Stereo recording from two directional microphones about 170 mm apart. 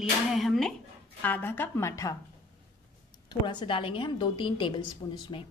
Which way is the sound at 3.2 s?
25° left (ahead or behind).